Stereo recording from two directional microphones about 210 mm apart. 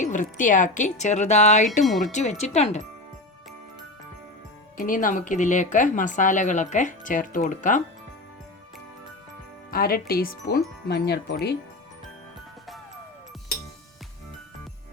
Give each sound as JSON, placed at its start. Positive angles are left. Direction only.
{"t": 0.0, "sound": "speech", "side_deg": 35}
{"t": 4.8, "sound": "speech", "side_deg": 40}
{"t": 9.7, "sound": "speech", "side_deg": 45}